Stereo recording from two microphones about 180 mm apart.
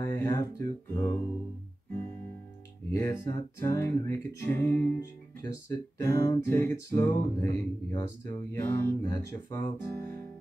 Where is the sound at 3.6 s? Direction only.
15° left (ahead or behind).